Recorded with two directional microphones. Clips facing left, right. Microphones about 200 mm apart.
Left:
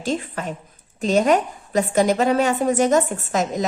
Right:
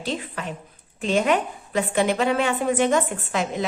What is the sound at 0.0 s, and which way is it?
A woman's voice, 45° left (ahead or behind).